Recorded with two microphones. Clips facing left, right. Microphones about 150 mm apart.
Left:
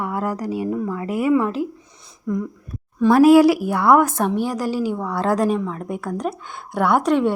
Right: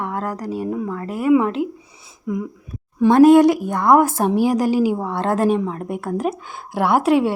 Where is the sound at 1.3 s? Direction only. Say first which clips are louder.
Right 4 dB; centre (ahead or behind).